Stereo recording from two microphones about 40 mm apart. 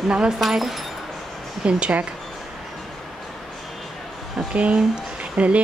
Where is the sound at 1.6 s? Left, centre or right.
Right.